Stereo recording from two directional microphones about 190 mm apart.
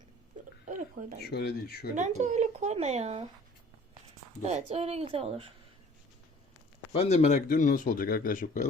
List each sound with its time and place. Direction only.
1.2 s speech: 55° left (ahead or behind)
2.0 s speech: 40° right (ahead or behind)
4.4 s speech: 35° right (ahead or behind)
6.9 s speech: 35° left (ahead or behind)